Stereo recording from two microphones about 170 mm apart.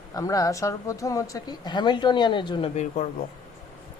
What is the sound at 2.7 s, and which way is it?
Speech, 45° left (ahead or behind).